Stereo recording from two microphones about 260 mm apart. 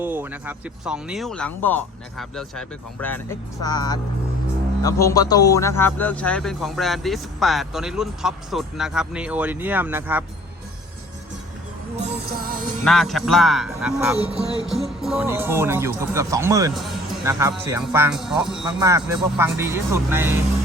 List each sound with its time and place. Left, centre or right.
0.0 s a man's voice: centre
11.9 s music: right
12.8 s a man's voice: centre
17.8 s a man's voice: centre
18.6 s speech: centre